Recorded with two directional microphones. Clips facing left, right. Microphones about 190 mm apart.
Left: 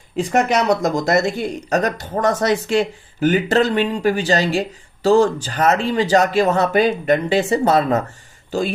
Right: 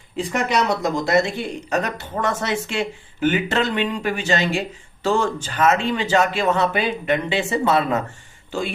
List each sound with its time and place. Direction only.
0.3 s speech: 45° left (ahead or behind)